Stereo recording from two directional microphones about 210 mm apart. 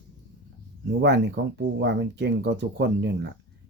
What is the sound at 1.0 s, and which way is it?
Speech, 55° right (ahead or behind).